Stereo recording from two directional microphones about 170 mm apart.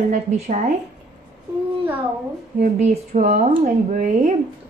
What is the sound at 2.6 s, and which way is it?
Speech, 45° right (ahead or behind).